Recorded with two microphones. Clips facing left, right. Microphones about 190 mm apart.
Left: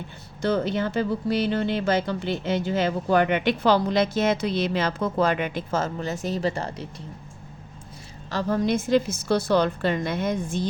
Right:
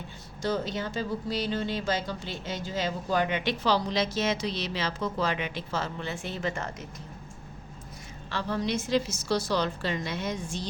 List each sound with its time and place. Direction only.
0.4 s speech: 60° left (ahead or behind); by 6.8 s 35° left (ahead or behind)
8.3 s a woman's voice: 45° left (ahead or behind)